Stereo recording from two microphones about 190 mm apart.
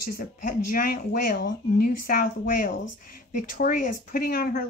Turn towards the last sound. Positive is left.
turn(degrees=50)  # may be behind; listen again after turning